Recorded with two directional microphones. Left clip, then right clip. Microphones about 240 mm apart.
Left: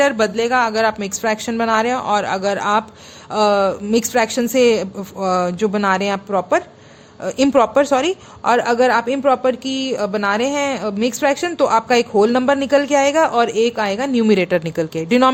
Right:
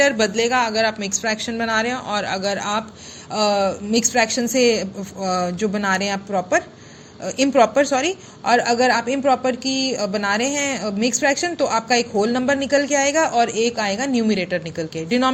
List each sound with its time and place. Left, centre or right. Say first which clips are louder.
0.0 s a woman's voice: left 1 dB; left